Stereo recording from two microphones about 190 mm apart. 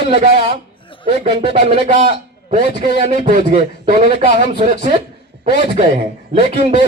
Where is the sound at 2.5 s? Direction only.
40° right (ahead or behind).